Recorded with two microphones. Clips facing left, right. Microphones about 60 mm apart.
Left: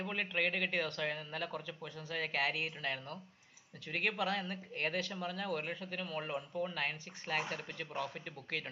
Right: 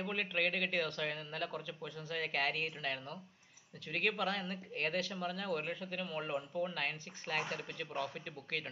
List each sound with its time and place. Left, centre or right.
0.0 s speech: centre